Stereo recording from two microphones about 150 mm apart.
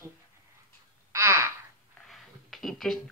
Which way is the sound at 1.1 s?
20° right (ahead or behind).